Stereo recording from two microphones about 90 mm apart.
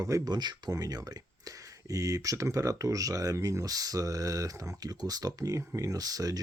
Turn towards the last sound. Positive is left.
turn(degrees=-45)  # may be behind; listen again after turning